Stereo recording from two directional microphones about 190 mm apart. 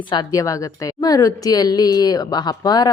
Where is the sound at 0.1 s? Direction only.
20° left (ahead or behind).